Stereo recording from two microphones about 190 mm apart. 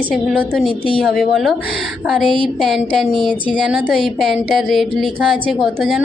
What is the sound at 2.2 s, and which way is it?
Speech, 25° right (ahead or behind).